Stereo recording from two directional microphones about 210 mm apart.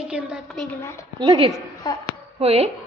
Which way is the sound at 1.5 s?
20° left (ahead or behind).